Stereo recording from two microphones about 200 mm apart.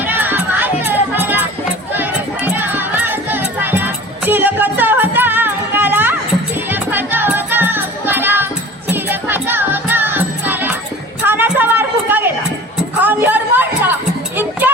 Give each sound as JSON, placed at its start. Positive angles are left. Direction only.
{"t": 0.0, "sound": "music", "side_deg": -10}
{"t": 11.3, "sound": "a sound", "side_deg": -10}
{"t": 13.0, "sound": "music", "side_deg": -10}